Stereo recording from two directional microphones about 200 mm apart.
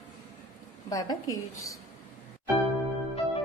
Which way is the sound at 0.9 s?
20° left (ahead or behind).